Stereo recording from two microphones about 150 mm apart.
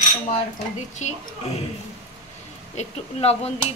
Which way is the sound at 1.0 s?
50° left (ahead or behind).